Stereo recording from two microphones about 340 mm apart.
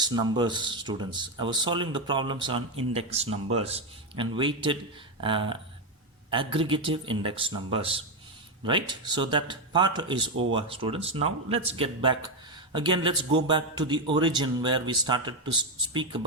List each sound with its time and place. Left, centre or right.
0.0 s a man's voice: centre